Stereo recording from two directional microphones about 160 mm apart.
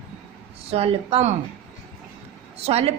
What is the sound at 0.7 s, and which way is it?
Speech, 40° right (ahead or behind).